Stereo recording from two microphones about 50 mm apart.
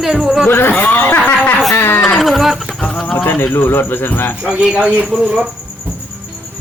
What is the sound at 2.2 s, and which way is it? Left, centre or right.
Speech, centre.